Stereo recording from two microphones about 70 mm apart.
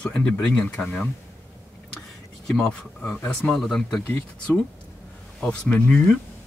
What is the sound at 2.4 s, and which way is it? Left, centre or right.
Speech, centre.